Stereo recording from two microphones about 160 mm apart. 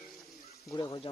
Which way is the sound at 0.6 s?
25° left (ahead or behind).